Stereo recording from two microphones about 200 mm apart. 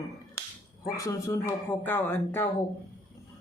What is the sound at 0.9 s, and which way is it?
Speech, 15° left (ahead or behind).